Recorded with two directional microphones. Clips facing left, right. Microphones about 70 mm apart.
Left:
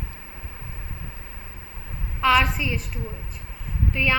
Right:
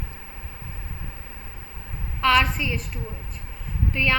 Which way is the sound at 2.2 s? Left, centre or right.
Centre.